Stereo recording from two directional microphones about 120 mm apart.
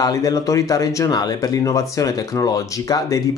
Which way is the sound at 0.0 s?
30° left (ahead or behind).